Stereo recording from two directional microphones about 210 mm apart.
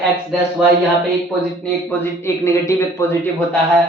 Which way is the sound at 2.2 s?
10° left (ahead or behind).